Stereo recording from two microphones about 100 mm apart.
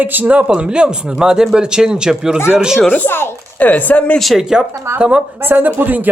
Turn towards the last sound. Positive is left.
turn(degrees=-20)  # may be behind; listen again after turning